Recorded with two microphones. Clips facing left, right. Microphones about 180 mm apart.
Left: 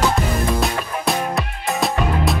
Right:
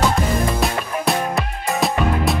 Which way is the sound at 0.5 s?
Centre (ahead or behind).